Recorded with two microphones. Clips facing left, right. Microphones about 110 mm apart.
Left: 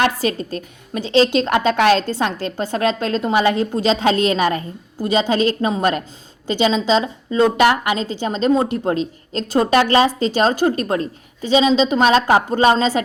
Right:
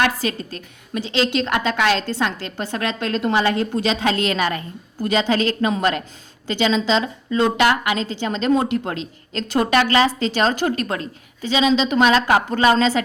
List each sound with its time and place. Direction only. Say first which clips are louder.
0.0 s speech: left 2 dB; 35° left (ahead or behind)
3.3 s a woman's voice: left 4 dB; 25° left (ahead or behind)
6.7 s a woman's voice: left 2 dB; 35° left (ahead or behind)